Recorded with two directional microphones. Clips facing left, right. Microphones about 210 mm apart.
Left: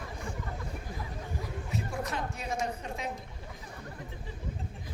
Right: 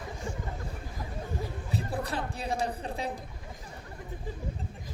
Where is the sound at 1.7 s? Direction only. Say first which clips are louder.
Right 2 dB; 35° right (ahead or behind).